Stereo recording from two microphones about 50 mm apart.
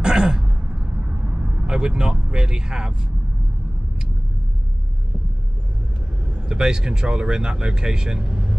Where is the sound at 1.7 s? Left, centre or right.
Centre.